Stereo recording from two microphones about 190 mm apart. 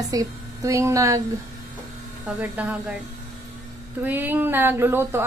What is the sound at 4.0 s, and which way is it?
A woman's voice, 10° right (ahead or behind).